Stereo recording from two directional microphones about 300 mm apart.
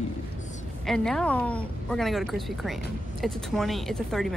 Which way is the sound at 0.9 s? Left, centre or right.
Centre.